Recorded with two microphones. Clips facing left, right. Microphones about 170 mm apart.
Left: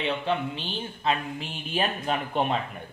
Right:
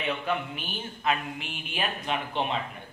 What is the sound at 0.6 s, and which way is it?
Speech, 30° left (ahead or behind).